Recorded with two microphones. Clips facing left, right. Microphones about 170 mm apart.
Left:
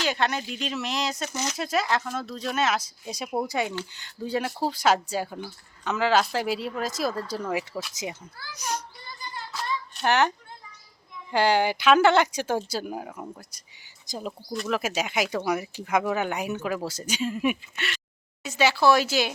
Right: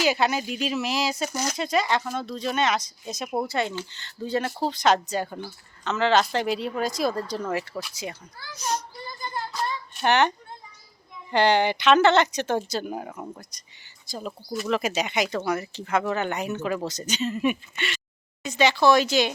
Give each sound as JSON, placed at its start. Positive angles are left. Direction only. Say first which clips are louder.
{"t": 0.0, "sound": "speech", "louder": "right 3 dB", "side_deg": -5}
{"t": 9.5, "sound": "a sound", "louder": "right 2 dB", "side_deg": 0}
{"t": 11.3, "sound": "speech", "louder": "right 1 dB", "side_deg": 5}
{"t": 14.1, "sound": "speech", "louder": "even", "side_deg": 15}
{"t": 14.7, "sound": "speech", "louder": "right 2 dB", "side_deg": 5}